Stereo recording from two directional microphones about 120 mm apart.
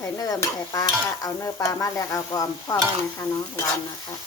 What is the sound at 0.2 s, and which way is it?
Stir, 30° left (ahead or behind).